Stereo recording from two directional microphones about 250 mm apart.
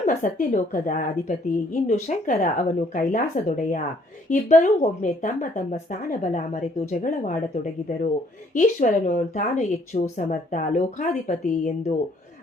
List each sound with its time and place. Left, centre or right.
0.0 s a woman's voice: left